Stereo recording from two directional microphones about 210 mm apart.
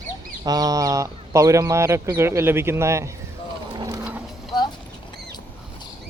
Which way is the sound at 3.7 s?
20° right (ahead or behind).